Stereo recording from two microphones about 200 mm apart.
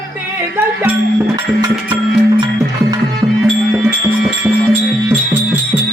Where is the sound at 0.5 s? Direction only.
10° right (ahead or behind).